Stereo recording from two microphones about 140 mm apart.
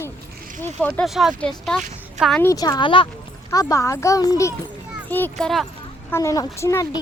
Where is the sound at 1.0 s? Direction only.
Centre (ahead or behind).